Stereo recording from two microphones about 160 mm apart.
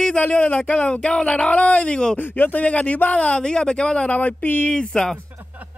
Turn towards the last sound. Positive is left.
turn(degrees=-10)  # may be behind; listen again after turning